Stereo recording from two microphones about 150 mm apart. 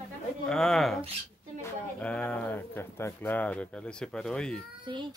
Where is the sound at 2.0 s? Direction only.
10° left (ahead or behind).